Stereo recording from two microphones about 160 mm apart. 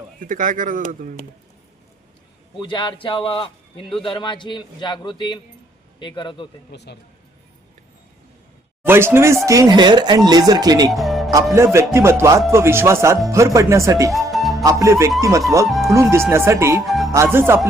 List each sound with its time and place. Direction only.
0.2 s speech: 55° right (ahead or behind)
2.6 s a man's voice: 30° left (ahead or behind)
6.7 s speech: 90° left
8.8 s speech: 15° right (ahead or behind)
10.9 s music: centre (ahead or behind)
11.5 s music: 15° right (ahead or behind)
13.3 s speech: 20° right (ahead or behind)
14.1 s music: centre (ahead or behind)
14.6 s speech: 20° right (ahead or behind)
15.6 s speech: centre (ahead or behind)
15.9 s music: 20° right (ahead or behind)
16.8 s speech: centre (ahead or behind)
17.3 s music: 15° right (ahead or behind)